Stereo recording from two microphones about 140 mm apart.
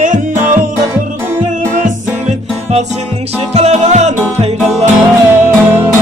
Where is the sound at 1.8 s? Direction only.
60° right (ahead or behind).